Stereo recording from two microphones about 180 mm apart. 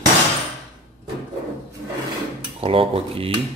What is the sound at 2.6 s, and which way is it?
Speech, 30° right (ahead or behind).